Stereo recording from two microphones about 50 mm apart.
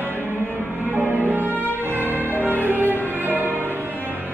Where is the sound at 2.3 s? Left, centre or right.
Left.